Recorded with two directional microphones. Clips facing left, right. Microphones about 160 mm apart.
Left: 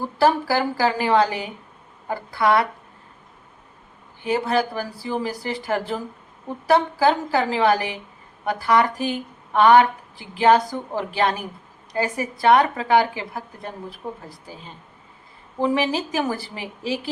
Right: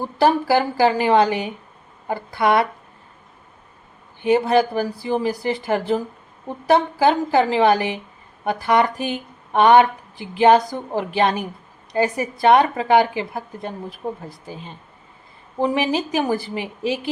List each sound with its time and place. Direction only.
0.2 s a woman's voice: 20° right (ahead or behind)
4.2 s a woman's voice: 20° right (ahead or behind)
15.7 s a woman's voice: 15° right (ahead or behind)